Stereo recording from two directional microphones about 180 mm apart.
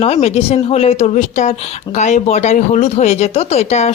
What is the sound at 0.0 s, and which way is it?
Speech, 35° left (ahead or behind).